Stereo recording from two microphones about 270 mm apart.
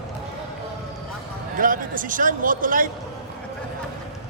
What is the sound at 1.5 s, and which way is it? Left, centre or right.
A man's voice, right.